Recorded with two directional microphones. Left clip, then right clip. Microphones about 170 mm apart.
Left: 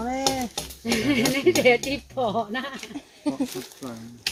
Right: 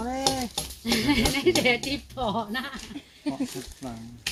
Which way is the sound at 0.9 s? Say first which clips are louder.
Left 1 dB; 35° right (ahead or behind).